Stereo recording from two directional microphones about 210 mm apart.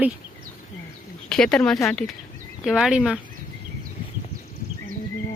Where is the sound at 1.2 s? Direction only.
5° left (ahead or behind).